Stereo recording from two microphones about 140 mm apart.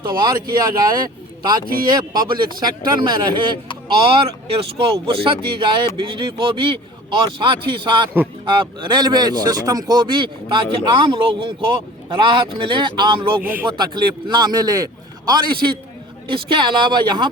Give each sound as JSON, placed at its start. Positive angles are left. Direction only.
{"t": 0.2, "sound": "speech", "side_deg": -30}
{"t": 13.4, "sound": "speech", "side_deg": -10}
{"t": 13.7, "sound": "speech", "side_deg": -30}